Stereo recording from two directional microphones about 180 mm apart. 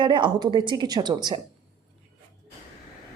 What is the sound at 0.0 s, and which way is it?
A woman's voice, 25° right (ahead or behind).